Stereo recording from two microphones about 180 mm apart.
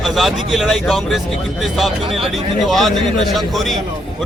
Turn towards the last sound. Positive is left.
turn(degrees=0)  # may be behind; listen again after turning